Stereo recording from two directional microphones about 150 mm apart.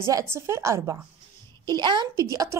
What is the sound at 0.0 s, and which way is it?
Speech, 20° right (ahead or behind).